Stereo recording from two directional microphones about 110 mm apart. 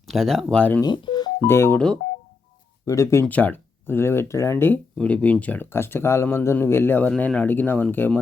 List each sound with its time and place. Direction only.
0.1 s speech: centre (ahead or behind)
0.8 s telephone dialing: 40° left (ahead or behind)
1.5 s speech: 20° left (ahead or behind)
2.8 s speech: 30° left (ahead or behind)
3.2 s speech: 15° left (ahead or behind)